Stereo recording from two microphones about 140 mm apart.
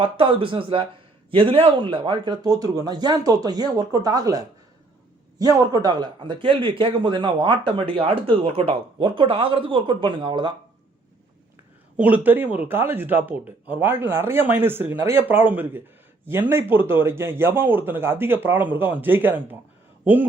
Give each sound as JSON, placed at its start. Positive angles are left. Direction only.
{"t": 0.0, "sound": "a man's voice", "side_deg": -40}
{"t": 11.9, "sound": "speech", "side_deg": -10}